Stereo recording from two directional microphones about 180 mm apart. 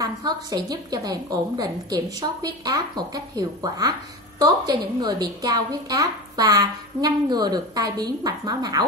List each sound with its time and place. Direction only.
0.0 s a woman's voice: 20° right (ahead or behind)